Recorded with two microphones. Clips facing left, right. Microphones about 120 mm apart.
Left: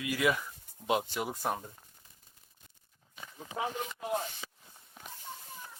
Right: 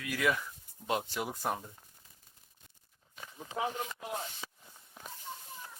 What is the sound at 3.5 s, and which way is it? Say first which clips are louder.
Speech: right 1 dB; centre (ahead or behind).